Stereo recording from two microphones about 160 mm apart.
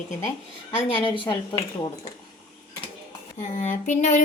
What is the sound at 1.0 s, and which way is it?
Speech, 30° left (ahead or behind).